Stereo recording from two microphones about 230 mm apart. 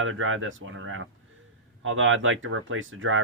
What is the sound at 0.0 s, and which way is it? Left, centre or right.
Speech, right.